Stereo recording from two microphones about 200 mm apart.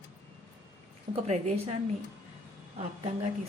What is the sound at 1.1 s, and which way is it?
Speech, 35° right (ahead or behind).